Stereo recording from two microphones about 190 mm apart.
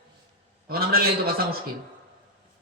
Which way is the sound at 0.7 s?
55° right (ahead or behind).